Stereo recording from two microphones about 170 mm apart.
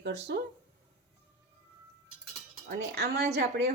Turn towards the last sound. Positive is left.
turn(degrees=-70)  # may be behind; listen again after turning